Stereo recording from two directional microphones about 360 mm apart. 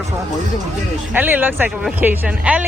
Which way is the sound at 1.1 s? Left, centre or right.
Centre.